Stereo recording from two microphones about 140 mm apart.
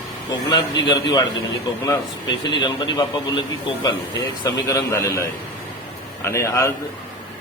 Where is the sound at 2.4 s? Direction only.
35° left (ahead or behind).